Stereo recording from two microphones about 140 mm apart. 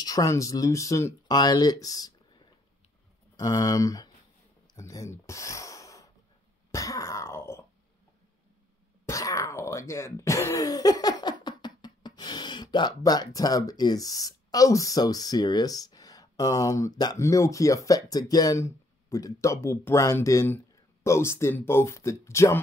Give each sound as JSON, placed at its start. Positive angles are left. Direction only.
{"t": 0.0, "sound": "speech", "side_deg": 25}
{"t": 3.3, "sound": "speech", "side_deg": 25}
{"t": 4.7, "sound": "a sound", "side_deg": 25}
{"t": 6.7, "sound": "throat clearing", "side_deg": 25}
{"t": 9.0, "sound": "speech", "side_deg": 25}